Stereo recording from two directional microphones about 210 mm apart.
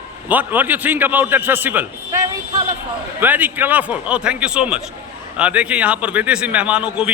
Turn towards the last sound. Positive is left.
turn(degrees=-5)  # may be behind; listen again after turning